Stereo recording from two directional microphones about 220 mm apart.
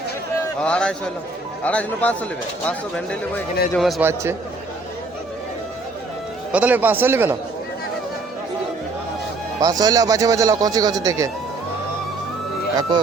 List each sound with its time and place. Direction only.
0.6 s a man's voice: 5° left (ahead or behind)
6.5 s speech: 5° right (ahead or behind)
9.6 s speech: 15° right (ahead or behind)